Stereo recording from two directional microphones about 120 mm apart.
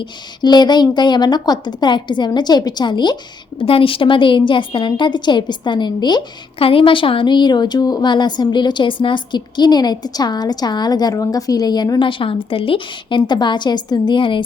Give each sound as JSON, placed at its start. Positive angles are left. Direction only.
{"t": 0.0, "sound": "a woman's voice", "side_deg": 35}
{"t": 3.6, "sound": "a woman's voice", "side_deg": 50}
{"t": 6.6, "sound": "a woman's voice", "side_deg": 50}